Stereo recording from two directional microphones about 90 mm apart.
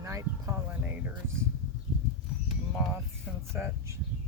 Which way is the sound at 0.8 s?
20° right (ahead or behind).